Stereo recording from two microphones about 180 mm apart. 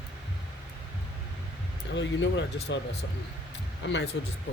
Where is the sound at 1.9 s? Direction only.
80° left.